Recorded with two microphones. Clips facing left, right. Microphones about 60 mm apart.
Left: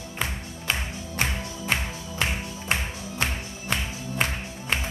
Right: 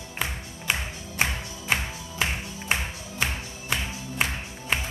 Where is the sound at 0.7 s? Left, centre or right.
Centre.